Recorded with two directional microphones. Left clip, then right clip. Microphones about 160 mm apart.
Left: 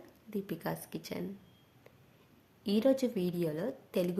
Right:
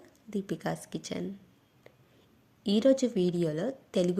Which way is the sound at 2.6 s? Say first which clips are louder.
Right 4 dB; 25° right (ahead or behind).